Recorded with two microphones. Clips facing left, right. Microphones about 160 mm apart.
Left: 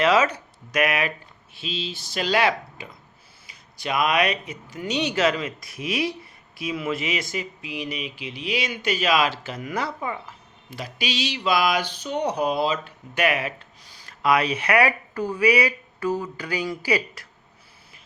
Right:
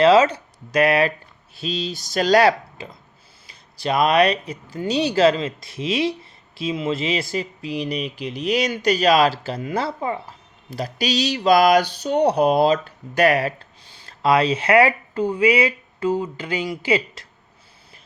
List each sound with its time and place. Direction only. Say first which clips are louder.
0.0 s speech: right 6 dB; 30° right (ahead or behind)
12.1 s speech: right 7 dB; 65° right (ahead or behind); by 17.2 s 25° right (ahead or behind)